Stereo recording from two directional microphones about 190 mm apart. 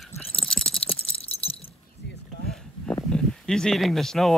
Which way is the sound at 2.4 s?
5° left (ahead or behind).